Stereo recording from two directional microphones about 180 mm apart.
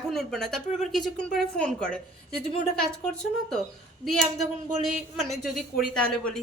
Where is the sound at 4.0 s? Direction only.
Centre (ahead or behind).